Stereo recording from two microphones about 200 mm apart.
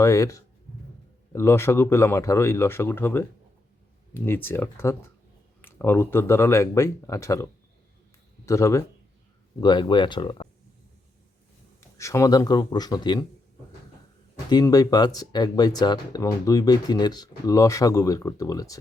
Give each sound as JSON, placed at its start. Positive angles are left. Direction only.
{"t": 0.0, "sound": "speech", "side_deg": 15}
{"t": 8.4, "sound": "speech", "side_deg": 15}
{"t": 11.8, "sound": "speech", "side_deg": 15}
{"t": 14.5, "sound": "speech", "side_deg": 20}